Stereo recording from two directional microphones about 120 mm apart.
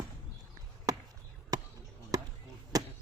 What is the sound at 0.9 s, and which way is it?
Basketball bounce, 30° right (ahead or behind).